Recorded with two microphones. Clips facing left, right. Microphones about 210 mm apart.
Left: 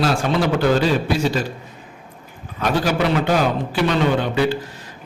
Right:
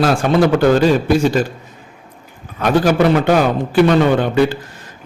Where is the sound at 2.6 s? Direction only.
50° right (ahead or behind).